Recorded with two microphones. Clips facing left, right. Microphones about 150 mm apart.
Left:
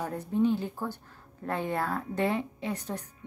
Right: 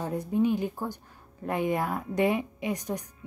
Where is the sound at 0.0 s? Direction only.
10° right (ahead or behind).